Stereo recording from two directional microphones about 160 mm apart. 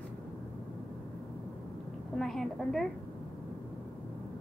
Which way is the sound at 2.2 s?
Centre (ahead or behind).